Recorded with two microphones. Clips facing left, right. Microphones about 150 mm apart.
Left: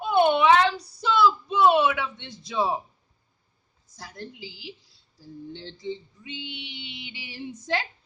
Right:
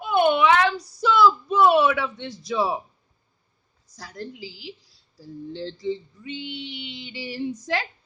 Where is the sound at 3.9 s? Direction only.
25° left (ahead or behind).